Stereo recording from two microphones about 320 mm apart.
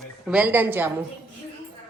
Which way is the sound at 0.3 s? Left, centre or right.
Centre.